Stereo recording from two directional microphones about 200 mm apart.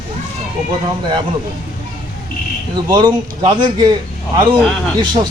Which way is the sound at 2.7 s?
25° right (ahead or behind).